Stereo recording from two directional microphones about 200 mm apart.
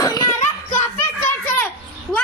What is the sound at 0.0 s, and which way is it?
Children playing, 15° left (ahead or behind).